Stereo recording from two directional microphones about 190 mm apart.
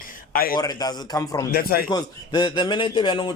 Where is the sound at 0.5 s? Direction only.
20° left (ahead or behind).